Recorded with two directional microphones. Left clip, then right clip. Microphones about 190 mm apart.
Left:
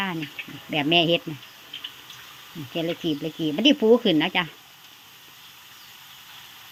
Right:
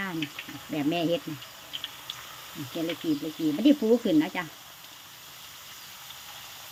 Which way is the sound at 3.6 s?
20° left (ahead or behind).